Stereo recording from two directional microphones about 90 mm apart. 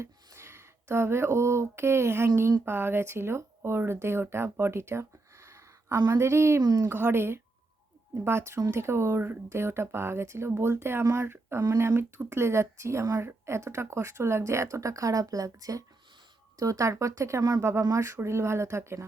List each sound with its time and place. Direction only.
0.0 s speech: 30° right (ahead or behind)
6.6 s speech: 45° right (ahead or behind)
6.8 s speech: 25° right (ahead or behind)